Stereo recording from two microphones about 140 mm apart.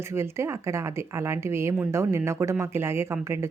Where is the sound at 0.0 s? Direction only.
20° right (ahead or behind).